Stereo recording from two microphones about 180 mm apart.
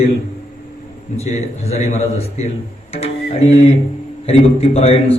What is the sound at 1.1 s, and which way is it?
A man's voice, 35° left (ahead or behind).